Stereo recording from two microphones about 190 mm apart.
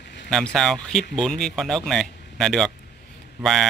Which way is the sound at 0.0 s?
65° left (ahead or behind).